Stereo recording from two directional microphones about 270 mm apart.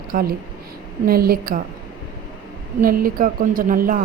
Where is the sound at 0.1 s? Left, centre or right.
Right.